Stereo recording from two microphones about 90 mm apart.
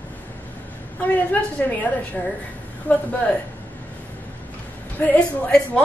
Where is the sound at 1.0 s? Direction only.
15° left (ahead or behind).